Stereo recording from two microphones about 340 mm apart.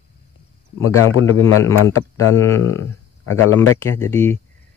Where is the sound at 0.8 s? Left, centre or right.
Left.